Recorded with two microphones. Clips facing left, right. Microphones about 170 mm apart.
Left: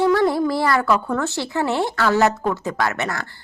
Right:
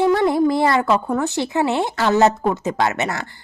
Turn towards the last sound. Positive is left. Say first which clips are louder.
# right 2 dB
turn(degrees=-20)  # may be behind; listen again after turning